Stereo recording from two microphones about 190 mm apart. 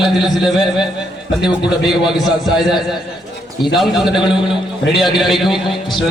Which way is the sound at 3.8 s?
Centre (ahead or behind).